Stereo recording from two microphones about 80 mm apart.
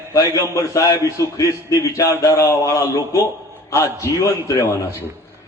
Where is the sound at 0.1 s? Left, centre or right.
Left.